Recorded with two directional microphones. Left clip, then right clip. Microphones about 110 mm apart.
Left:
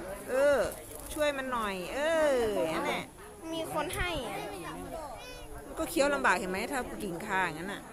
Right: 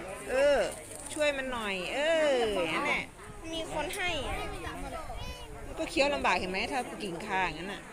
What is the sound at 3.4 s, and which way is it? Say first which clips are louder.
Speech: left 1 dB; 50° left (ahead or behind).